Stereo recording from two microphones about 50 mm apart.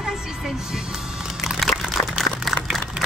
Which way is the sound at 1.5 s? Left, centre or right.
Centre.